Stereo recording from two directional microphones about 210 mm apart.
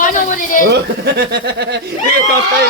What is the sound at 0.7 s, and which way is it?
Speech, 50° right (ahead or behind).